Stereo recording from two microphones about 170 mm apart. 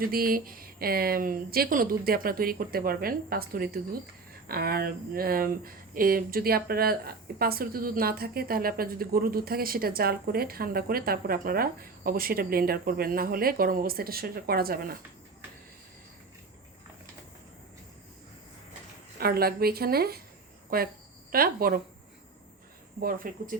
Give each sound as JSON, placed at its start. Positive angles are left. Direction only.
{"t": 0.0, "sound": "speech", "side_deg": -60}
{"t": 19.2, "sound": "speech", "side_deg": -65}
{"t": 23.0, "sound": "speech", "side_deg": -55}